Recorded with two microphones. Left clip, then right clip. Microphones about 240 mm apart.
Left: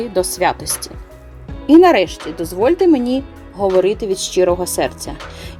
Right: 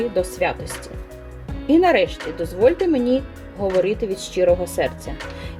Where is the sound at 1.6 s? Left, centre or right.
Left.